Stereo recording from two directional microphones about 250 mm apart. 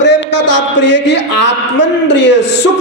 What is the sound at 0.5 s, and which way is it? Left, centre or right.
A man's voice, left.